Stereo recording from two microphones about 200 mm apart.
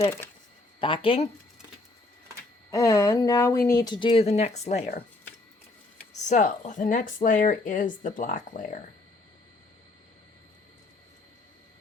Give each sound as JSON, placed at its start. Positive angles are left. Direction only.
{"t": 0.0, "sound": "speech", "side_deg": 10}
{"t": 0.8, "sound": "speech", "side_deg": 25}
{"t": 2.6, "sound": "speech", "side_deg": 15}
{"t": 6.2, "sound": "speech", "side_deg": 40}